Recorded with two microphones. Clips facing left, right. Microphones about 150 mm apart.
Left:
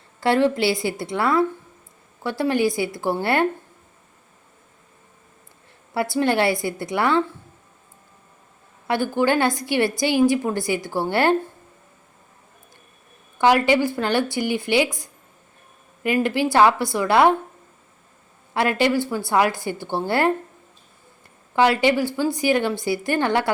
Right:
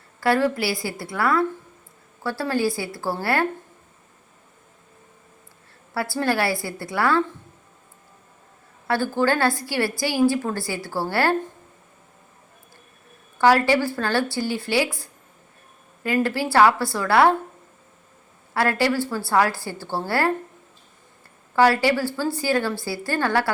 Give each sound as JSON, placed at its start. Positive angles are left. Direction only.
{"t": 0.2, "sound": "a woman's voice", "side_deg": 25}
{"t": 5.9, "sound": "a woman's voice", "side_deg": 20}
{"t": 8.9, "sound": "a woman's voice", "side_deg": 15}
{"t": 13.4, "sound": "a woman's voice", "side_deg": 15}
{"t": 18.5, "sound": "a woman's voice", "side_deg": 20}
{"t": 21.5, "sound": "a woman's voice", "side_deg": 20}